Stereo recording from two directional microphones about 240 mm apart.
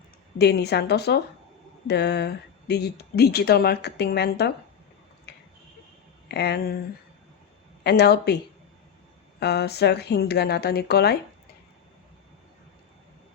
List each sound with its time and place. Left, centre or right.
0.3 s speech: left
6.2 s speech: left
7.9 s speech: left
9.4 s speech: left